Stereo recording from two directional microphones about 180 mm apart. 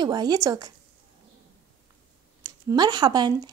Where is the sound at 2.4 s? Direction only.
20° right (ahead or behind).